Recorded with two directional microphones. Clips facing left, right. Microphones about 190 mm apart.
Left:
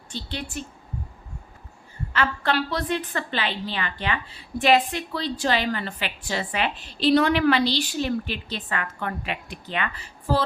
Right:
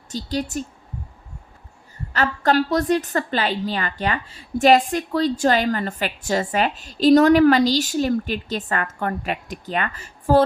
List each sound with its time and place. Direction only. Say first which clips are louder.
0.1 s speech: right 8 dB; 40° right (ahead or behind)
2.1 s a woman's voice: right 5 dB; 40° right (ahead or behind)